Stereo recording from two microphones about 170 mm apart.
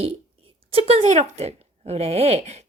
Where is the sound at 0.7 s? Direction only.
35° right (ahead or behind).